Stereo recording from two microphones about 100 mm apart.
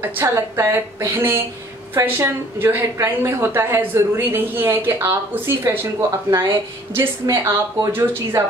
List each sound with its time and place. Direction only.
0.0 s a woman's voice: 25° right (ahead or behind)